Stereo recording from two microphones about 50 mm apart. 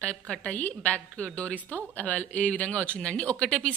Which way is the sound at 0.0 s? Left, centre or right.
Left.